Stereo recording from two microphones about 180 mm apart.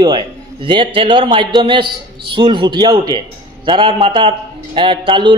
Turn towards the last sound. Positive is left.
turn(degrees=-25)  # may be behind; listen again after turning